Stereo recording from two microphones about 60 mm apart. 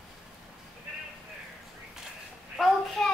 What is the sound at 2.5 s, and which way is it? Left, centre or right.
Speech, centre.